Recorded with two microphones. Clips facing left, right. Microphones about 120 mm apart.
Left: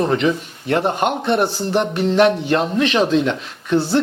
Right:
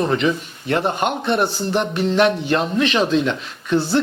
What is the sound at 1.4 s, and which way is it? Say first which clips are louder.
Music: left 1 dB; 25° left (ahead or behind).